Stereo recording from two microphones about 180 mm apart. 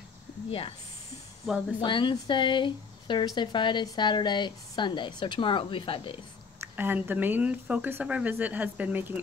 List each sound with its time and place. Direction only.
0.5 s speech: 30° left (ahead or behind)
1.8 s speech: 25° left (ahead or behind)
6.6 s speech: 10° right (ahead or behind)